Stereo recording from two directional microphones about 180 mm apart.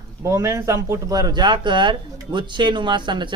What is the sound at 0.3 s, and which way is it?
Speech, 15° right (ahead or behind).